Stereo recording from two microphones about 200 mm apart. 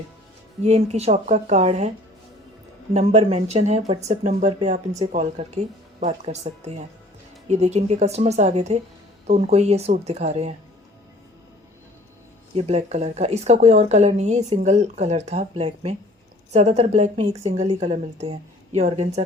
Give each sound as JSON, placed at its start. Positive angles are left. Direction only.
{"t": 0.6, "sound": "a woman's voice", "side_deg": -35}
{"t": 2.9, "sound": "a woman's voice", "side_deg": -35}
{"t": 12.5, "sound": "a woman's voice", "side_deg": -30}